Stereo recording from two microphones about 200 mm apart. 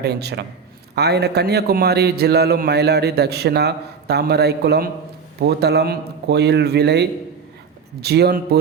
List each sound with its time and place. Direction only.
0.0 s a man's voice: 55° right (ahead or behind)